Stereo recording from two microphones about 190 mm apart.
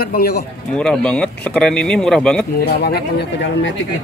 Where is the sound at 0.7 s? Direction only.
5° left (ahead or behind).